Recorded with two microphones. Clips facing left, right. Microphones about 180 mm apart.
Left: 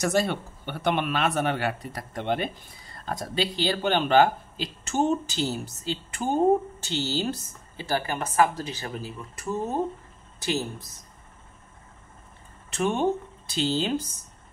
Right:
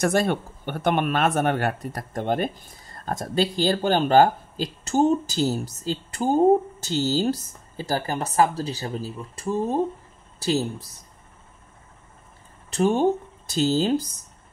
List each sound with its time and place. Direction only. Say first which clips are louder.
0.0 s speech: right 3 dB; 55° right (ahead or behind); by 10.9 s 35° right (ahead or behind)
12.6 s speech: right 4 dB; 35° right (ahead or behind)